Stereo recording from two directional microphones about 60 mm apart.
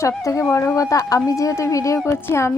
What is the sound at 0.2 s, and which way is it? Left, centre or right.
Speech, left.